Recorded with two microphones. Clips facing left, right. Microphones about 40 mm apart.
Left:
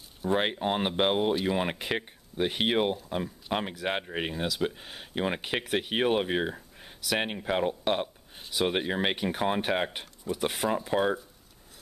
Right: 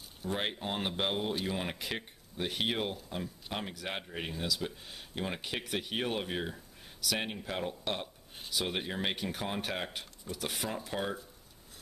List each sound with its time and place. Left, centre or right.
0.3 s speech: left